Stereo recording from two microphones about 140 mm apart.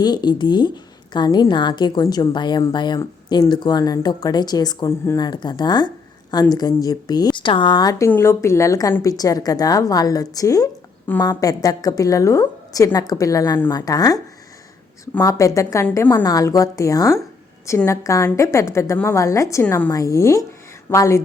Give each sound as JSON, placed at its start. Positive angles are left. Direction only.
{"t": 0.0, "sound": "a woman's voice", "side_deg": 30}
{"t": 4.9, "sound": "speech", "side_deg": 20}
{"t": 5.2, "sound": "a woman's voice", "side_deg": 30}
{"t": 15.2, "sound": "speech", "side_deg": 20}